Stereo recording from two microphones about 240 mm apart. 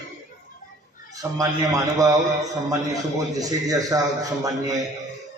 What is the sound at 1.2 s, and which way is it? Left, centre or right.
A man's voice, centre.